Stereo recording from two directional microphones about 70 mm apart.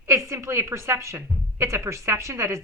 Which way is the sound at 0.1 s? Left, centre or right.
Right.